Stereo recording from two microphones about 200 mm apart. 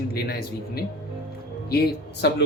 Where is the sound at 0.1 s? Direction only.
50° left (ahead or behind).